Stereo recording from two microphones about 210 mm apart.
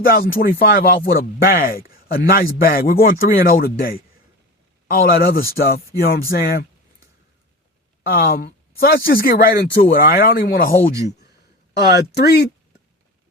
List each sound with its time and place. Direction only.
0.0 s speech: 45° left (ahead or behind)
5.0 s speech: 45° left (ahead or behind)
8.0 s speech: 45° left (ahead or behind)
11.9 s speech: 50° left (ahead or behind)